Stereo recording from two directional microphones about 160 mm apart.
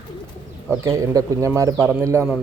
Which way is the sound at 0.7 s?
20° right (ahead or behind).